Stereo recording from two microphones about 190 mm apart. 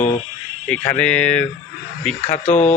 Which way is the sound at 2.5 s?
40° left (ahead or behind).